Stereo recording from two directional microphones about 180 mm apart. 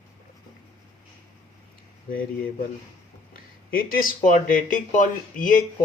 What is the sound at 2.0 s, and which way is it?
Speech, 50° left (ahead or behind).